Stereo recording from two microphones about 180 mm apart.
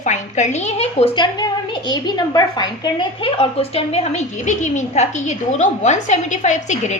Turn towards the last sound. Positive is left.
turn(degrees=40)  # may be behind; listen again after turning